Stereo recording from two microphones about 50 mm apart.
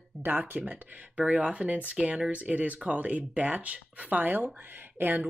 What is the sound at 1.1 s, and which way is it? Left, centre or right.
Speech, right.